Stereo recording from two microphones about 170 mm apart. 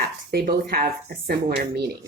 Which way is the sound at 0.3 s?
60° right (ahead or behind).